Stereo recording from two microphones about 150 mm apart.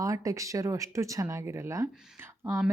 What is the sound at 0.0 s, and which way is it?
A woman's voice, 20° right (ahead or behind).